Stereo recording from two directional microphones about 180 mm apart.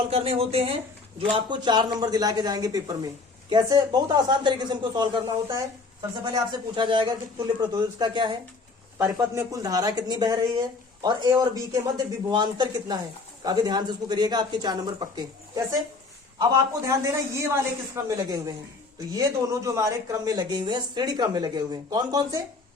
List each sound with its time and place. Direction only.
0.1 s speech: 35° right (ahead or behind)